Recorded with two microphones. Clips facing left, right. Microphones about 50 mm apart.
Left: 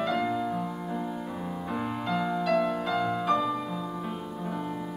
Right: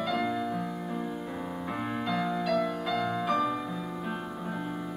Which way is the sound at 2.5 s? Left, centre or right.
Centre.